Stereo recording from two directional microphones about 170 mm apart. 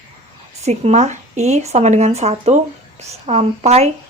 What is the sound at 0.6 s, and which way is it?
A woman's voice, 40° right (ahead or behind).